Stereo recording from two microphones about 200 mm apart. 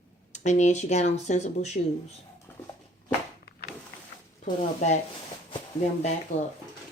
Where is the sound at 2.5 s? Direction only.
10° left (ahead or behind).